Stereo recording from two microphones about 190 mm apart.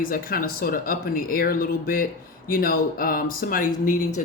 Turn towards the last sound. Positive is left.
turn(degrees=45)  # may be behind; listen again after turning